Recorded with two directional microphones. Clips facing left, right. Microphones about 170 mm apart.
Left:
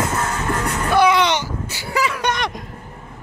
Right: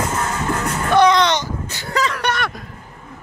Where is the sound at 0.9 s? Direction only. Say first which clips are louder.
Right 2 dB; 10° left (ahead or behind).